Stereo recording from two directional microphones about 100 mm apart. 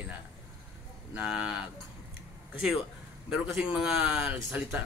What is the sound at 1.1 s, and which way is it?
Speech, 10° right (ahead or behind).